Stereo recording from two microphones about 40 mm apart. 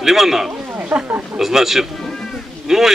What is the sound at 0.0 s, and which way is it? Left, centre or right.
Speech, centre.